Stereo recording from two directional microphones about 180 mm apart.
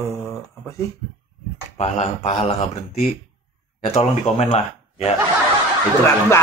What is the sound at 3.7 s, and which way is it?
A man's voice, 35° left (ahead or behind).